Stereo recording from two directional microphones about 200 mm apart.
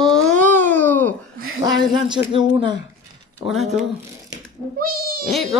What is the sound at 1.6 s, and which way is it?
Speech, 20° right (ahead or behind).